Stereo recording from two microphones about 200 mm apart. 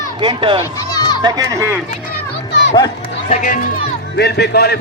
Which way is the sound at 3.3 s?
40° left (ahead or behind).